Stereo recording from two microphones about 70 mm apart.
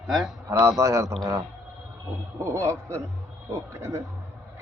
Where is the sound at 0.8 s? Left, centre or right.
Right.